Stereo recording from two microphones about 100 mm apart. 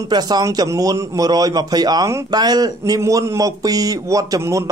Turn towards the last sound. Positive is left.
turn(degrees=-35)  # may be behind; listen again after turning